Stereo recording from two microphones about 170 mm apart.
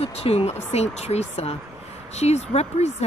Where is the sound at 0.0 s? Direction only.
35° left (ahead or behind).